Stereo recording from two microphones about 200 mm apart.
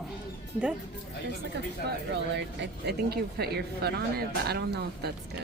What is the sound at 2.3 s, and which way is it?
Speech, 60° right (ahead or behind).